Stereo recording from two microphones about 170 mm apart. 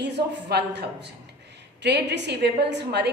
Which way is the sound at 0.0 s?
80° right.